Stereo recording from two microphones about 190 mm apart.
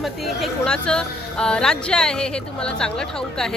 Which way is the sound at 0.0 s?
Centre (ahead or behind).